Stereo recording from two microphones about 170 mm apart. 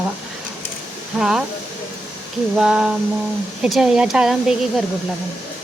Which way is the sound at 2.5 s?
5° right (ahead or behind).